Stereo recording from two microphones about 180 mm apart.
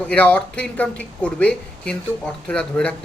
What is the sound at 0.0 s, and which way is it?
A man's voice, 10° left (ahead or behind).